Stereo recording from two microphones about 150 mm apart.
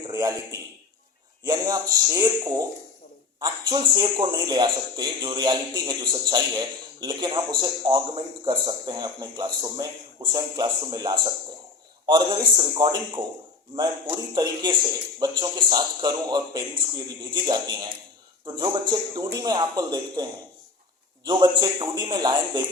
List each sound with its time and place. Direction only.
0.1 s a sound: 25° right (ahead or behind)
1.5 s a man's voice: 25° right (ahead or behind)
21.2 s speech: 30° right (ahead or behind)